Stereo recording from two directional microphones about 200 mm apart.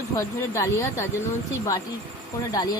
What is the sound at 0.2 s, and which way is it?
Speech, 15° left (ahead or behind).